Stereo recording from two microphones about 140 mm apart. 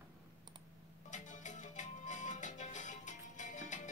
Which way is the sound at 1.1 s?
60° left (ahead or behind).